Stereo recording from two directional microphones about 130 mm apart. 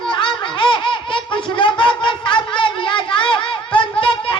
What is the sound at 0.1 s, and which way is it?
Laughter, 40° left (ahead or behind).